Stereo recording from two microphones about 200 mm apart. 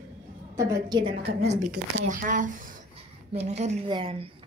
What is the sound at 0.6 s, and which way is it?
Speech, 15° right (ahead or behind).